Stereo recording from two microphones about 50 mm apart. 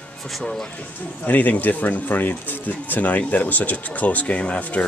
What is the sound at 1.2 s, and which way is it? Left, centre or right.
Speech, left.